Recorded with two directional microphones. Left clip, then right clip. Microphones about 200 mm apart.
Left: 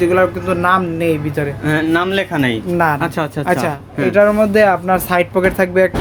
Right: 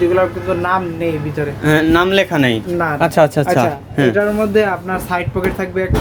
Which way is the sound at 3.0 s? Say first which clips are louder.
Right 7 dB; 20° right (ahead or behind).